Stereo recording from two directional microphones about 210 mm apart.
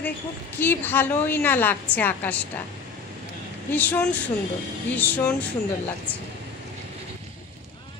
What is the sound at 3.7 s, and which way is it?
A woman's voice, 5° left (ahead or behind).